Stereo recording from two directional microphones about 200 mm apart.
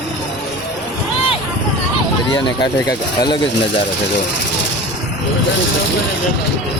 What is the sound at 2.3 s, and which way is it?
Speech, 20° left (ahead or behind).